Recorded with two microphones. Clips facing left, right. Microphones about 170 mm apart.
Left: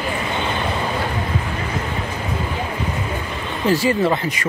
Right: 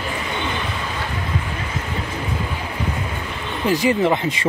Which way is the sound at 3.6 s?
15° right (ahead or behind).